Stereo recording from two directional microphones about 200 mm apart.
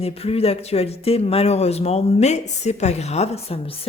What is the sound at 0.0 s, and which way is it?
Speech, 30° left (ahead or behind).